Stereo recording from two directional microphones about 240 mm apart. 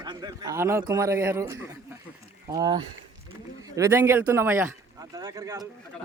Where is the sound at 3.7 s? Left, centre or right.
Centre.